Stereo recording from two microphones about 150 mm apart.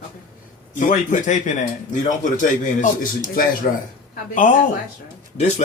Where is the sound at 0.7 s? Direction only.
60° left (ahead or behind).